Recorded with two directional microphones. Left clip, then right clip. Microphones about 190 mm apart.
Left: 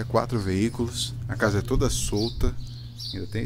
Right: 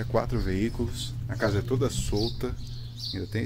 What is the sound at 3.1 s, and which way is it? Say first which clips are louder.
Speech: even; centre (ahead or behind).